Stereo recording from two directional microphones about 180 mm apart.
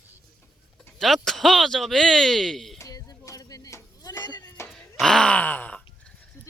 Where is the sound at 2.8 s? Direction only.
20° left (ahead or behind).